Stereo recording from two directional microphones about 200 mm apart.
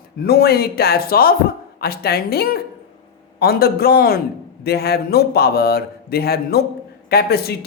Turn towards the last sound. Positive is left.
turn(degrees=50)  # may be behind; listen again after turning